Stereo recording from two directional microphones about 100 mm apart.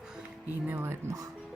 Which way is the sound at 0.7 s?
20° right (ahead or behind).